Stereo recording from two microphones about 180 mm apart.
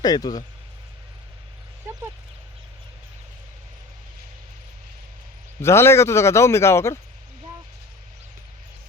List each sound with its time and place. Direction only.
0.0 s speech: 20° left (ahead or behind)
5.6 s a man's voice: 15° left (ahead or behind)